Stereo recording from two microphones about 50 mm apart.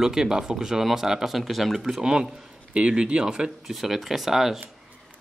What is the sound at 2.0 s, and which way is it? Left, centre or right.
Speech, centre.